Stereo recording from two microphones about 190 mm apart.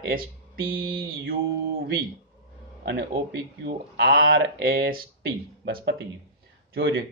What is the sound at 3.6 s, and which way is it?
Speech, 60° right (ahead or behind).